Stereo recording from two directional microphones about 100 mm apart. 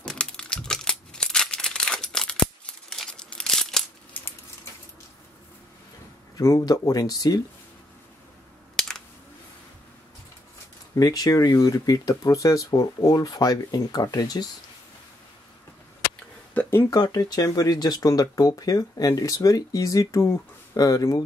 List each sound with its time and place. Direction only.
0.0 s crumpling: 10° left (ahead or behind)
6.3 s speech: 40° left (ahead or behind)
11.0 s speech: 35° left (ahead or behind)
16.9 s speech: 40° left (ahead or behind)